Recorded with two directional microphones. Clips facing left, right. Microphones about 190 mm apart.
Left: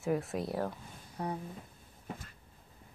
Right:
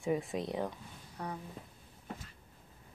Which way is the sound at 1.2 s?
25° left (ahead or behind).